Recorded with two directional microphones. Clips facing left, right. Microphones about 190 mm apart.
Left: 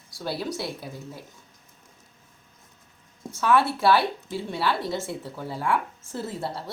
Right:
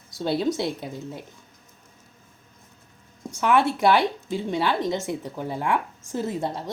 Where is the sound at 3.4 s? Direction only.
15° right (ahead or behind).